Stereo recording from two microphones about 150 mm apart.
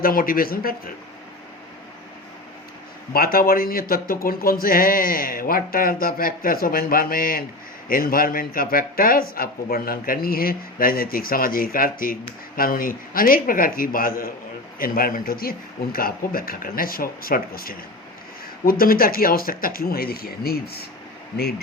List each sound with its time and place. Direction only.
0.0 s speech: 70° left (ahead or behind)
3.1 s speech: 80° left